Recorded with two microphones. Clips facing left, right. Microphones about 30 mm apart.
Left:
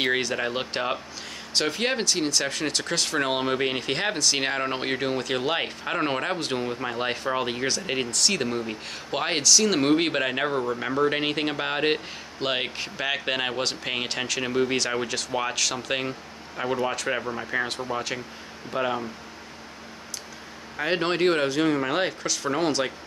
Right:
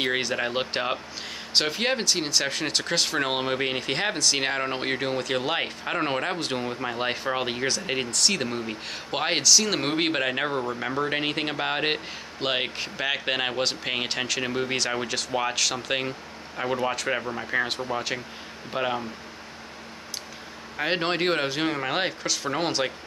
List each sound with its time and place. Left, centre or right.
0.2 s speech: centre
20.7 s speech: centre